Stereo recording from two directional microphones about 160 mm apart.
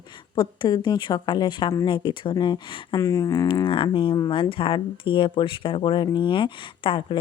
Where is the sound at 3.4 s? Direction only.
30° left (ahead or behind).